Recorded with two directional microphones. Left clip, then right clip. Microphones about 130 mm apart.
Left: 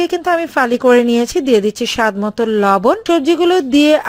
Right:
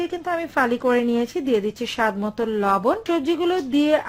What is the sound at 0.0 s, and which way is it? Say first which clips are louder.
Speech: left 10 dB; 45° left (ahead or behind).